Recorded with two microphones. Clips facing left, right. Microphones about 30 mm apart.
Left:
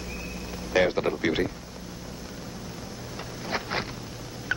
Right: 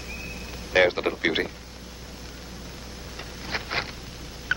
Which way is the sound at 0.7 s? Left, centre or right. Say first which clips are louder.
Right 2 dB; right.